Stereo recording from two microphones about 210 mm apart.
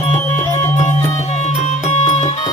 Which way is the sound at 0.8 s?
35° left (ahead or behind).